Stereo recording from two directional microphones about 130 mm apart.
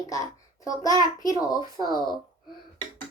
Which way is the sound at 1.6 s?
30° right (ahead or behind).